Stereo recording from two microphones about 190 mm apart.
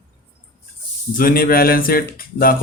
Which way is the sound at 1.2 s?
50° left (ahead or behind).